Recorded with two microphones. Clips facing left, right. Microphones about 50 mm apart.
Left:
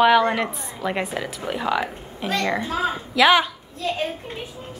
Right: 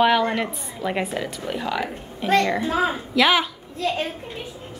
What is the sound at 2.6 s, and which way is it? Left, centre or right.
Speech, centre.